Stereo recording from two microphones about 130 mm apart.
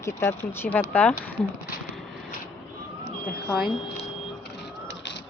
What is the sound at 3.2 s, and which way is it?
Smoke detector, 5° left (ahead or behind).